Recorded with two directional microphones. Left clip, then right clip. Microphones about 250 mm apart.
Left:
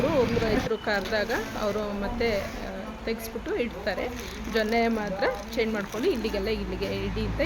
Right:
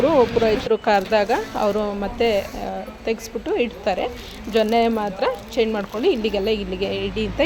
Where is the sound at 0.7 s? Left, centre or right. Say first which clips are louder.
Right 9 dB; right.